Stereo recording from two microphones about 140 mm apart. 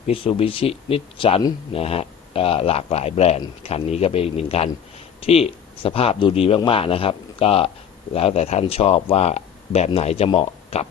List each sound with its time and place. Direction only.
0.1 s speech: 40° left (ahead or behind)